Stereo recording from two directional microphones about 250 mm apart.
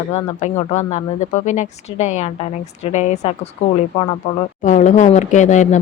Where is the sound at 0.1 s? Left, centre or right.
Left.